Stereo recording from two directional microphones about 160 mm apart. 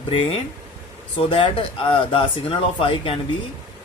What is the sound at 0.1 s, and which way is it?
Speech, 40° left (ahead or behind).